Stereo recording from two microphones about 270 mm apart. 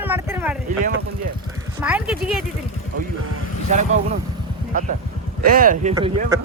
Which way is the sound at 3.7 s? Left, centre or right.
Right.